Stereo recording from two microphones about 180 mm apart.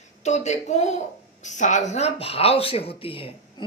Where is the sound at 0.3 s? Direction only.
40° left (ahead or behind).